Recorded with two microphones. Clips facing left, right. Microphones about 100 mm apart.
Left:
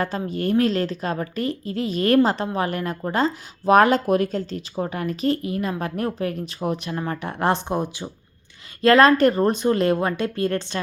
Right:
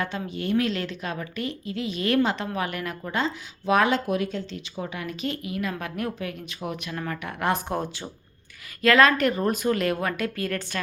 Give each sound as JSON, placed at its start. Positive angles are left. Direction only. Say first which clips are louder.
{"t": 0.0, "sound": "speech", "louder": "left 5 dB", "side_deg": 40}
{"t": 7.7, "sound": "speech", "louder": "left 4 dB", "side_deg": 15}
{"t": 8.8, "sound": "speech", "louder": "left 5 dB", "side_deg": 35}